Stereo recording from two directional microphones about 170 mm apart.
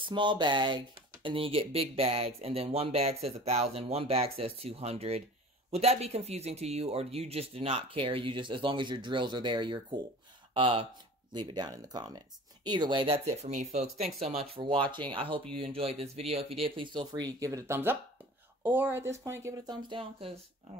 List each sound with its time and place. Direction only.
0.0 s speech: 30° right (ahead or behind)